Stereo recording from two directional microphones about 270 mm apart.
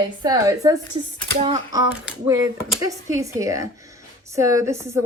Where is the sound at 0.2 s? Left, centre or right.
Centre.